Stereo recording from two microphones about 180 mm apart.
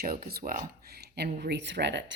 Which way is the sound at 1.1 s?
65° right (ahead or behind).